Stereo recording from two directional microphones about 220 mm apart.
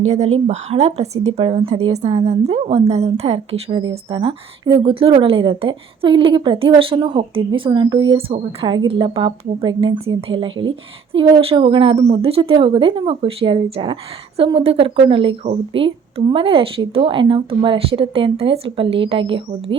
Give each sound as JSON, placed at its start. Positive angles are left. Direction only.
{"t": 0.1, "sound": "a woman's voice", "side_deg": -30}